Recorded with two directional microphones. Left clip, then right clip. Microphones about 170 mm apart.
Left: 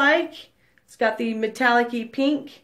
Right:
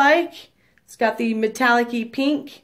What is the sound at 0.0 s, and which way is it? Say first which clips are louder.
A woman's voice: right 3 dB; 25° right (ahead or behind).